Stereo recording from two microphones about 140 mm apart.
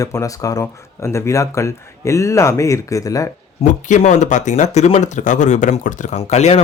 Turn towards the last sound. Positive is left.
turn(degrees=50)  # may be behind; listen again after turning